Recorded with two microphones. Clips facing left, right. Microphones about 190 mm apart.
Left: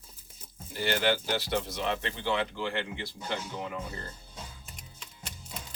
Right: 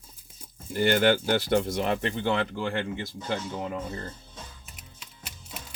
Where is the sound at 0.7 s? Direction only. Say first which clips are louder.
Right 6 dB; 55° right (ahead or behind).